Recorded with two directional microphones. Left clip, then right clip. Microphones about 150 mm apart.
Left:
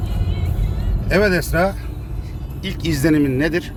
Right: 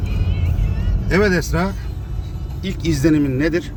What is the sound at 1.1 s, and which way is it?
Speech, 10° left (ahead or behind).